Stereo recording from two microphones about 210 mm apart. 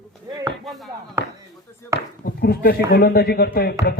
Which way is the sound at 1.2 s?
15° right (ahead or behind).